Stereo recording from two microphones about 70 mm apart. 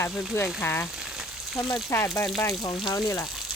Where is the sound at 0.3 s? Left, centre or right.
Left.